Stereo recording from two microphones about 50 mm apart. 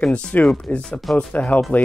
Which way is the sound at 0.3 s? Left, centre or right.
Left.